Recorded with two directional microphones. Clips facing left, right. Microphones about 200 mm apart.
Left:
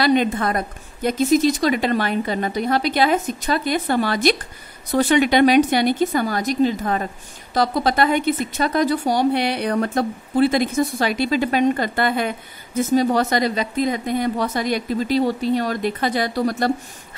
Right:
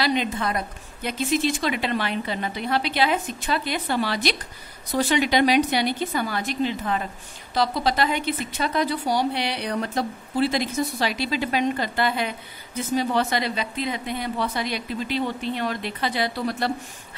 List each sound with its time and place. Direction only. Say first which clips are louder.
0.0 s a woman's voice: left 6 dB; 50° left (ahead or behind)